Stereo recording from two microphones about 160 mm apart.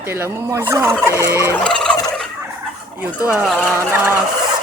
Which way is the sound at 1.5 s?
5° left (ahead or behind).